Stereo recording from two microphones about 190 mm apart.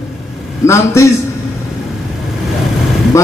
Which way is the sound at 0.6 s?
15° left (ahead or behind).